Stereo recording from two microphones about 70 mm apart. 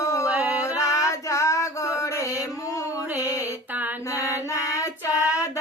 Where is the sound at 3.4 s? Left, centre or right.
Right.